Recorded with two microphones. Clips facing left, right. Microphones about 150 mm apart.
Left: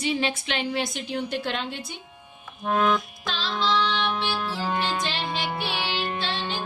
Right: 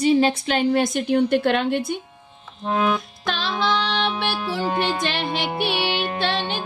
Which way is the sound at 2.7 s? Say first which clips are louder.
Right 1 dB; 10° right (ahead or behind).